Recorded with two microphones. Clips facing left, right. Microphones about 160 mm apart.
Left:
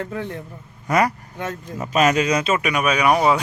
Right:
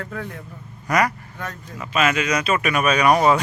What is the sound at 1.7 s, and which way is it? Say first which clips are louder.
Speech: left 3 dB; 40° left (ahead or behind).